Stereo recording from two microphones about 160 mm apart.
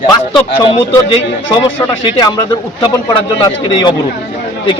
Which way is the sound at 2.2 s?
25° left (ahead or behind).